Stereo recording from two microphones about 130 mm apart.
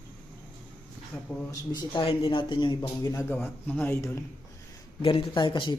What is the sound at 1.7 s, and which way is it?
Speech, 30° left (ahead or behind).